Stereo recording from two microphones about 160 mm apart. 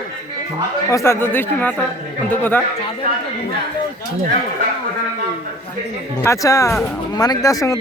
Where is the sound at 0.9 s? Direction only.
15° left (ahead or behind).